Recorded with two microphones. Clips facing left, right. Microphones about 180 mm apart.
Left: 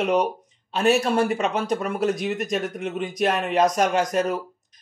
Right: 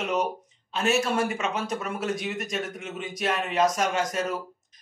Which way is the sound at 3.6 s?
65° left (ahead or behind).